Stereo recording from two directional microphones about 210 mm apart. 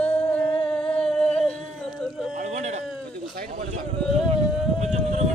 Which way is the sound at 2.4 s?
35° right (ahead or behind).